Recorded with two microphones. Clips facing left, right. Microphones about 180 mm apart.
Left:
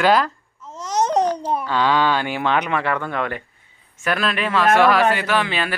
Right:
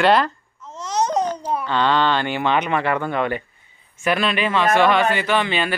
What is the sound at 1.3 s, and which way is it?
Speech, 10° left (ahead or behind).